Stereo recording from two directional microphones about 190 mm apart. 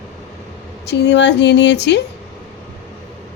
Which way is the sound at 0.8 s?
65° left (ahead or behind).